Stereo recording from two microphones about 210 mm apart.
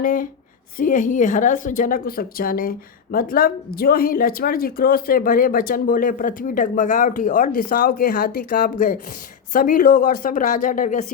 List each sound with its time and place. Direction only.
0.0 s a woman's voice: 40° left (ahead or behind)